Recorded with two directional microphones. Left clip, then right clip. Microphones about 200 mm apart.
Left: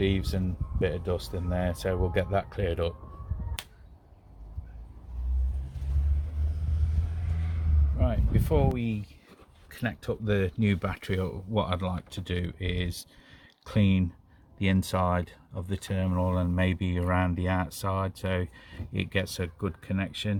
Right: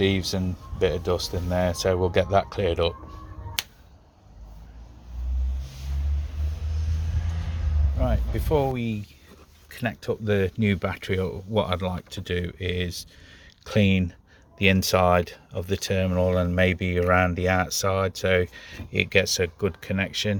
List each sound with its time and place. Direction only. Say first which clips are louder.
0.0 s speech: right 5 dB; 25° right (ahead or behind)
7.9 s a sound: right 3 dB; 30° right (ahead or behind)
9.6 s speech: right 5 dB; 25° right (ahead or behind)